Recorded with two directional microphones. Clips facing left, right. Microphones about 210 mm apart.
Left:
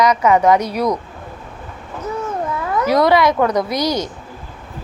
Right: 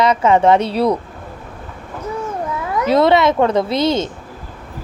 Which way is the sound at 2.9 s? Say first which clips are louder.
Right 1 dB; 25° right (ahead or behind).